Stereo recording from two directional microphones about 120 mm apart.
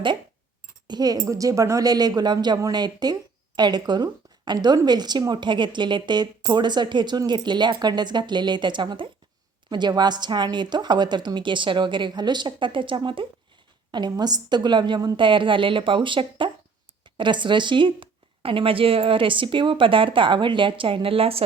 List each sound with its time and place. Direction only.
0.9 s a woman's voice: 35° right (ahead or behind); by 21.4 s 55° right (ahead or behind)